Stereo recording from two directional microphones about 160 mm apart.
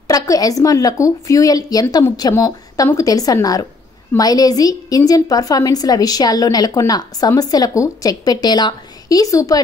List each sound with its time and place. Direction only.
0.1 s a woman's voice: 20° left (ahead or behind)